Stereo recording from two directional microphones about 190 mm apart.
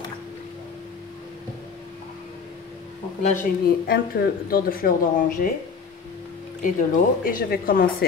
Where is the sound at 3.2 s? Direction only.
40° left (ahead or behind).